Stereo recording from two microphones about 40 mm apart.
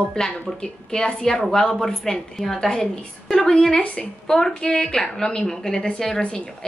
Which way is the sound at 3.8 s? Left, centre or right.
Left.